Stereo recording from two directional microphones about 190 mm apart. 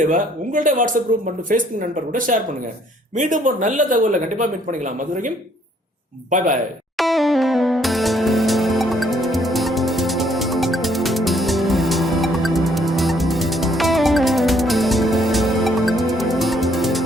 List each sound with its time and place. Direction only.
0.1 s speech: 45° right (ahead or behind)
6.9 s music: centre (ahead or behind)